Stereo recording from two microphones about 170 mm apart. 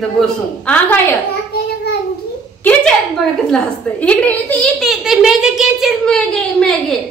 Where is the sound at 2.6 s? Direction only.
10° left (ahead or behind).